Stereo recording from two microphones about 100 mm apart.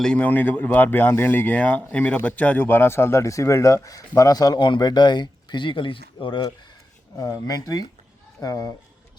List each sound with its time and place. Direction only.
0.0 s speech: 10° left (ahead or behind); by 6.5 s 55° left (ahead or behind)
7.2 s speech: 40° left (ahead or behind)